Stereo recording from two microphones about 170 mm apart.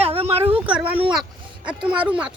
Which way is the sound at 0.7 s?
10° right (ahead or behind).